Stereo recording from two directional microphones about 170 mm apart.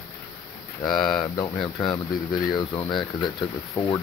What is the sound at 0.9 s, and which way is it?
Speech, 5° left (ahead or behind).